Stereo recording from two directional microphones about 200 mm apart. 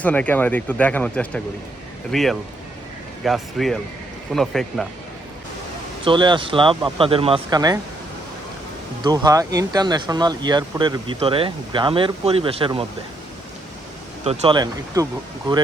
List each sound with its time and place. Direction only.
0.0 s speech: 5° left (ahead or behind)
6.1 s speech: 25° right (ahead or behind)
9.0 s speech: 20° right (ahead or behind)
14.3 s speech: 25° right (ahead or behind)